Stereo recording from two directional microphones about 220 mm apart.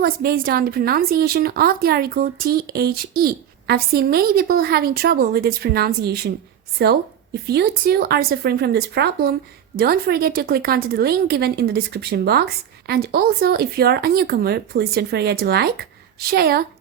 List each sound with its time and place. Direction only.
0.0 s a woman's voice: 40° right (ahead or behind)